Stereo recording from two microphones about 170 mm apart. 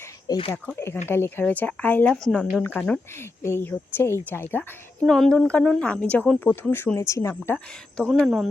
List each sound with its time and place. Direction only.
0.3 s speech: 30° left (ahead or behind)
0.5 s speech: 10° left (ahead or behind)